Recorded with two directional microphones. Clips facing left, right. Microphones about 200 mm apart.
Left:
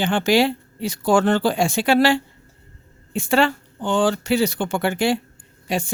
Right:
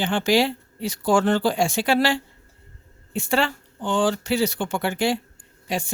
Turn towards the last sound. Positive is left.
turn(degrees=60)  # may be behind; listen again after turning